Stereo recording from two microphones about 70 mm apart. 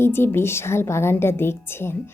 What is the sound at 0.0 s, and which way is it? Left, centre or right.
Speech, left.